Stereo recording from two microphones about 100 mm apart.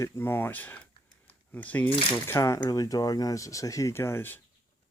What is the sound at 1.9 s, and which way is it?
Speech, 60° left (ahead or behind).